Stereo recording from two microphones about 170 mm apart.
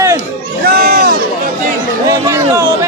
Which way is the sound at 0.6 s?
65° right (ahead or behind).